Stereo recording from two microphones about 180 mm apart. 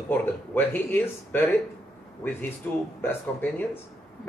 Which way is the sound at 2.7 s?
10° left (ahead or behind).